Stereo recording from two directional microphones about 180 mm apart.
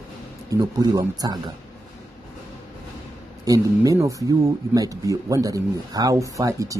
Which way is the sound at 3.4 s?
20° right (ahead or behind).